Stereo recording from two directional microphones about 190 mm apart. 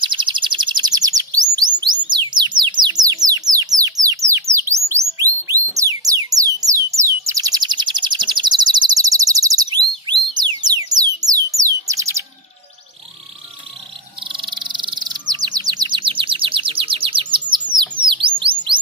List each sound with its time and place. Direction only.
0.0 s bird: 25° right (ahead or behind)
1.8 s music: 25° right (ahead or behind)
14.2 s bird: 25° right (ahead or behind)
18.0 s chirp: 25° right (ahead or behind)